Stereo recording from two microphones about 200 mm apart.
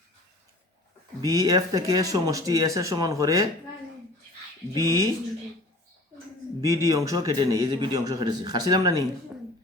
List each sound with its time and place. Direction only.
1.2 s speech: 15° right (ahead or behind)
4.7 s speech: 15° right (ahead or behind)
6.6 s a man's voice: 15° right (ahead or behind)